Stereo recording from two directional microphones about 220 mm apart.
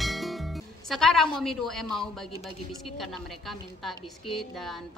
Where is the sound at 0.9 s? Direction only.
Centre (ahead or behind).